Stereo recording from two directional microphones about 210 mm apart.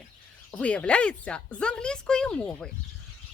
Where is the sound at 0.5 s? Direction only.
5° left (ahead or behind).